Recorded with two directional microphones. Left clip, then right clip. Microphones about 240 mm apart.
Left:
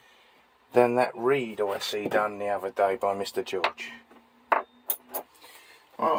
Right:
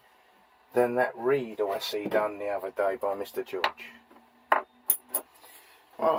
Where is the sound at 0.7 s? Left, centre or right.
Left.